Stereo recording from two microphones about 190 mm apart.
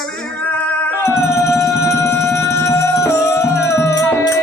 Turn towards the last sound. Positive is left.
turn(degrees=15)  # may be behind; listen again after turning